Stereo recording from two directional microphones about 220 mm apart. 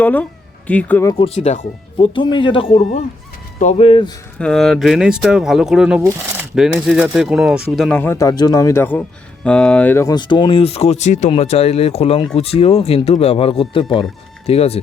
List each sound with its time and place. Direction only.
0.0 s speech: 5° left (ahead or behind)
1.1 s speech: 25° left (ahead or behind)
4.4 s speech: 5° left (ahead or behind); by 14.8 s 25° left (ahead or behind)